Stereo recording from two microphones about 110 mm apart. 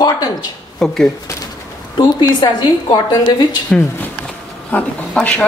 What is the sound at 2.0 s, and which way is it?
A woman's voice, 45° left (ahead or behind).